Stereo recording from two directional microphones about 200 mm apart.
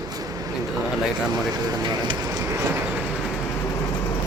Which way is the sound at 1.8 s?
20° right (ahead or behind).